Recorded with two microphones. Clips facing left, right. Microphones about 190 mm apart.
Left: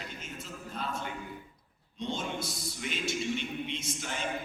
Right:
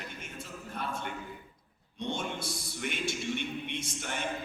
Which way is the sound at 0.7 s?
60° right (ahead or behind).